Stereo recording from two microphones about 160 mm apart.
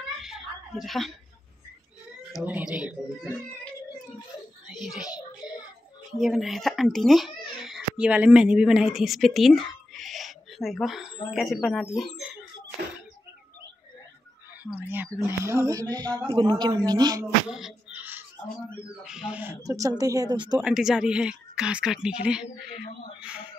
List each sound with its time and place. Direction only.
0.2 s a sound: 5° right (ahead or behind)
2.4 s speech: 10° right (ahead or behind)
4.6 s a child's voice: centre (ahead or behind)
6.1 s speech: centre (ahead or behind)
9.9 s owl: centre (ahead or behind)
11.3 s a woman's voice: centre (ahead or behind)
14.6 s speech: 10° right (ahead or behind); by 17.2 s 25° right (ahead or behind)
17.2 s speech: 5° right (ahead or behind); by 20.6 s 25° right (ahead or behind)
20.6 s a woman's voice: 5° right (ahead or behind)